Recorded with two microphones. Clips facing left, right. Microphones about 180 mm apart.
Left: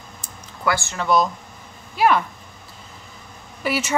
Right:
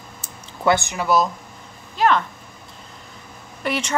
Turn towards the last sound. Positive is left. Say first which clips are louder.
# left 1 dB
turn(degrees=5)  # may be behind; listen again after turning